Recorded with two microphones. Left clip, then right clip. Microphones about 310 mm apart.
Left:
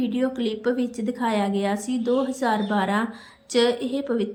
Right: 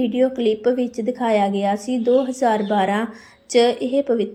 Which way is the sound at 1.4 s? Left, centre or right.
Left.